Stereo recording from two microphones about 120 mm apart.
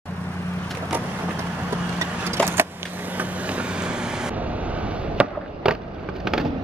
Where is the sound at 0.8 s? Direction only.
15° right (ahead or behind).